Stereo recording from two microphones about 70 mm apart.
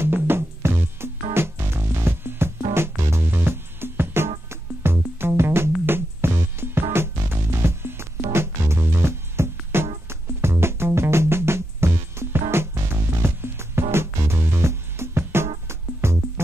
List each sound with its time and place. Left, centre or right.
0.0 s music: right